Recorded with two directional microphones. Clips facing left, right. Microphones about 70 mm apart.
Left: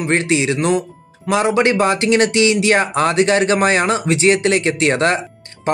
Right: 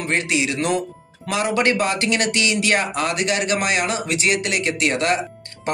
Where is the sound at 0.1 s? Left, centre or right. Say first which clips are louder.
Left 5 dB; left.